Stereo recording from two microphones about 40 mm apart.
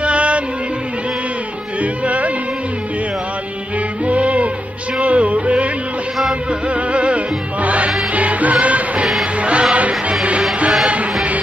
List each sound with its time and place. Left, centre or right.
0.0 s music: right
1.8 s music: right
4.0 s music: right
6.7 s music: right